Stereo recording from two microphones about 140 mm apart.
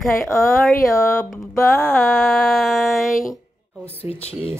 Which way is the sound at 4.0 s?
45° left (ahead or behind).